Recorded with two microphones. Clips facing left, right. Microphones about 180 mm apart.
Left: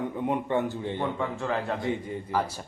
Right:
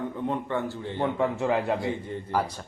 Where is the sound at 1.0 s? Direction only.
20° right (ahead or behind).